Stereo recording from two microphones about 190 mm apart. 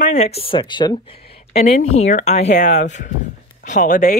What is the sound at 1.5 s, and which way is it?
Speech, 35° left (ahead or behind).